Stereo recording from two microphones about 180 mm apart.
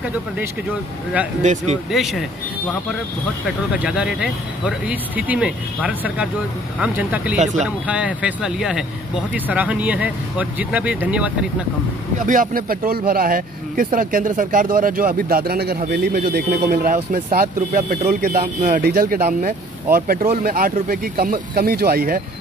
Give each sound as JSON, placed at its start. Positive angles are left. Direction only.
{"t": 1.4, "sound": "speech", "side_deg": -40}
{"t": 1.9, "sound": "speech", "side_deg": 0}
{"t": 3.7, "sound": "speech", "side_deg": -5}
{"t": 7.3, "sound": "speech", "side_deg": -40}
{"t": 7.6, "sound": "speech", "side_deg": -5}
{"t": 12.3, "sound": "speech", "side_deg": -50}